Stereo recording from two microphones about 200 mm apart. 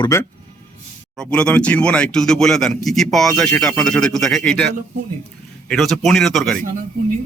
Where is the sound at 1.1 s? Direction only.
5° left (ahead or behind).